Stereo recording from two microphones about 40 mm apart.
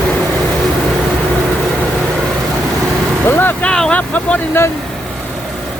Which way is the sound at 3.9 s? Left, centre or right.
Left.